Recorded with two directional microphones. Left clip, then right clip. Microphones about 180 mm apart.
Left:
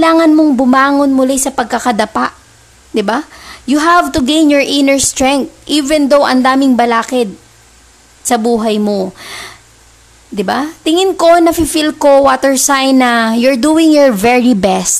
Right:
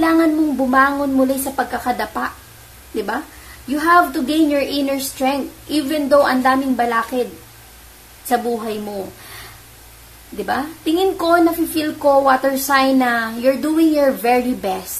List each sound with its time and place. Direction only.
0.0 s a woman's voice: 50° left (ahead or behind)
8.3 s a woman's voice: 50° left (ahead or behind)